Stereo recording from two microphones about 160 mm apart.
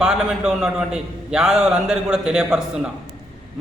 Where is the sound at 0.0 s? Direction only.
5° right (ahead or behind).